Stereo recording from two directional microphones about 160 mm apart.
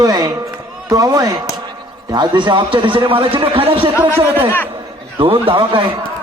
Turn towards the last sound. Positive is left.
turn(degrees=-35)  # may be behind; listen again after turning